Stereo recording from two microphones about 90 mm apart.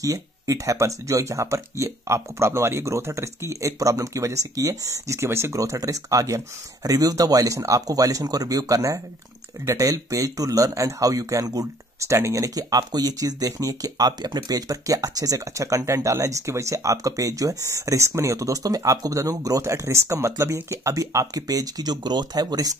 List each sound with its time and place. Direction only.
0.0 s speech: 40° right (ahead or behind)